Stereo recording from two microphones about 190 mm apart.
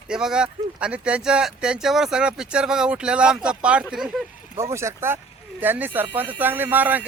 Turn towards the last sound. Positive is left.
turn(degrees=-10)  # may be behind; listen again after turning